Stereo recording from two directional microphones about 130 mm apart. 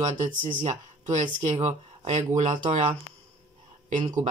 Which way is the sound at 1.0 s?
70° right (ahead or behind).